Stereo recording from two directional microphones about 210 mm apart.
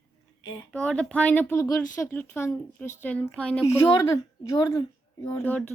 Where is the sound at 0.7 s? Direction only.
5° left (ahead or behind).